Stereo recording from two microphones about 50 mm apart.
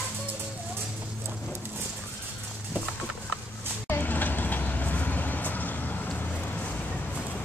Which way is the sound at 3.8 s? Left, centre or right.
Left.